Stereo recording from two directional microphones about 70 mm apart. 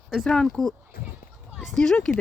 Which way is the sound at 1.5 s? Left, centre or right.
Centre.